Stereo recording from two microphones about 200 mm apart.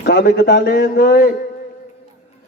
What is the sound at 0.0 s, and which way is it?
A man's voice, 50° left (ahead or behind).